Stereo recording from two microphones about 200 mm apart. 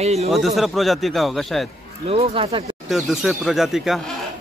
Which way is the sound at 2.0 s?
30° right (ahead or behind).